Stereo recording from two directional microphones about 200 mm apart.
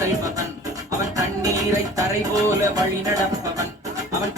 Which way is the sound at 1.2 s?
15° right (ahead or behind).